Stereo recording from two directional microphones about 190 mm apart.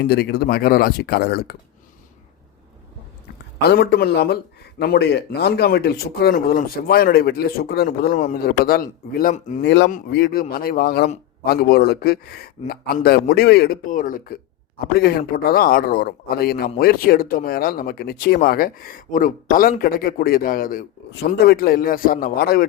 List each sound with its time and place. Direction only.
0.0 s speech: 60° left (ahead or behind)
3.7 s speech: 55° left (ahead or behind)
9.6 s speech: 65° left (ahead or behind)
10.1 s speech: 55° left (ahead or behind)